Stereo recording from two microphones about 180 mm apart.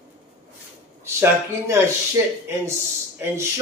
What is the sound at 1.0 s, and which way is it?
Speech, 15° right (ahead or behind).